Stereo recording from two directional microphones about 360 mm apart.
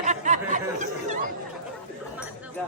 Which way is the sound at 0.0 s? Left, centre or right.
Centre.